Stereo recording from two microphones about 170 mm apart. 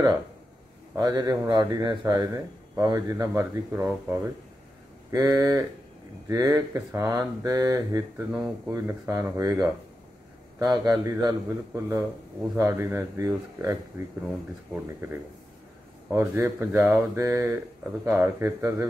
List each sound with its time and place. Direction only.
0.9 s speech: 25° right (ahead or behind)